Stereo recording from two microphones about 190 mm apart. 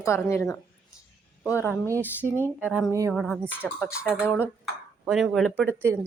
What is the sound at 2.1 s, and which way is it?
Speech, 10° right (ahead or behind).